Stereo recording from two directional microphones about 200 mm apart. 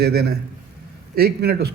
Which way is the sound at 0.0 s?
50° right (ahead or behind).